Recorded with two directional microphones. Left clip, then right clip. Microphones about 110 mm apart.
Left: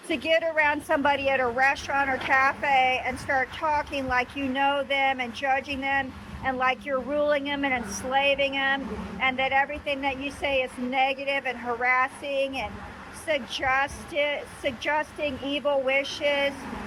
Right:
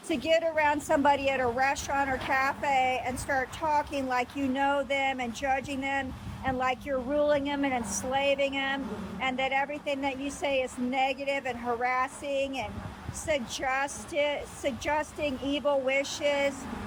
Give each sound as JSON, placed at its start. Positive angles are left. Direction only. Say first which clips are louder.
{"t": 0.1, "sound": "a woman's voice", "louder": "left 2 dB", "side_deg": -45}